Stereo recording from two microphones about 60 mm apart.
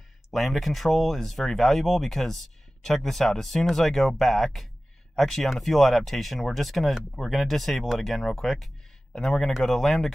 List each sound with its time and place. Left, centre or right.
0.3 s speech: centre